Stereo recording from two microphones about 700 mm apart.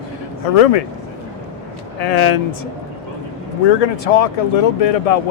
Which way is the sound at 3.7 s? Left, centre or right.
Left.